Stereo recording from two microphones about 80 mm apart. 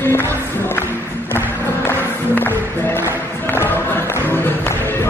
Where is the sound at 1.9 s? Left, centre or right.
Left.